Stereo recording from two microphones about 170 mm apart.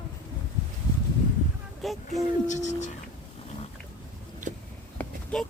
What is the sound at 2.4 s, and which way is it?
Speech, 45° left (ahead or behind).